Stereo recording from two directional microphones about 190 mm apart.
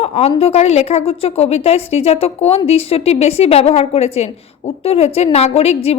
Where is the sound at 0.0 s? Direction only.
30° left (ahead or behind).